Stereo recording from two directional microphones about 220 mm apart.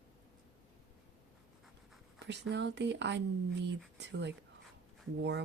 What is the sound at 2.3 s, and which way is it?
Speech, 50° right (ahead or behind).